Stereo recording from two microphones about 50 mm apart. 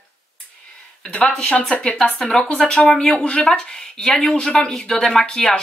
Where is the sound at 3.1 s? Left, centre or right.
Centre.